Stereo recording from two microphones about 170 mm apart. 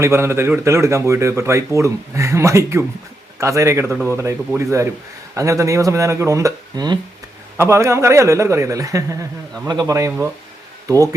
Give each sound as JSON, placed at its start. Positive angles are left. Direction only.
{"t": 0.0, "sound": "speech", "side_deg": -15}